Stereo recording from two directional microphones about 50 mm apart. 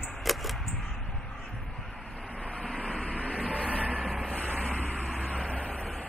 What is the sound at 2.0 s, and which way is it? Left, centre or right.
Vehicle, centre.